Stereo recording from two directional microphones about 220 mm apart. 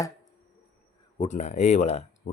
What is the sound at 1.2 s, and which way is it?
Speech, 30° left (ahead or behind).